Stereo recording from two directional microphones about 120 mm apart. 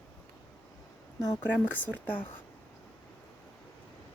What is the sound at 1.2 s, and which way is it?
Speech, 30° left (ahead or behind).